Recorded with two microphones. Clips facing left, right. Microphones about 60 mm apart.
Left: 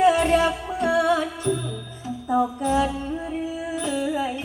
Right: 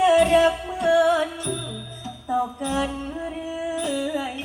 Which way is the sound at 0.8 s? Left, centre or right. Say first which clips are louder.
Right 2 dB; left.